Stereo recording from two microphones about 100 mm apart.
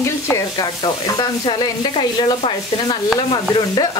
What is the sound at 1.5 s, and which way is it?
Speech, 55° left (ahead or behind).